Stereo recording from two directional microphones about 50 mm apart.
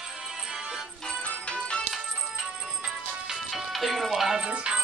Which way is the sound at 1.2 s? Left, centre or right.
Left.